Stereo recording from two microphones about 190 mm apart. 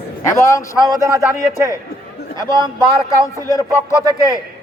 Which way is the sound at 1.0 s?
15° right (ahead or behind).